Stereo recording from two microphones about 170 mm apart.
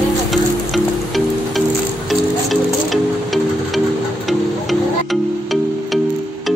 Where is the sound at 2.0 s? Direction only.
Centre (ahead or behind).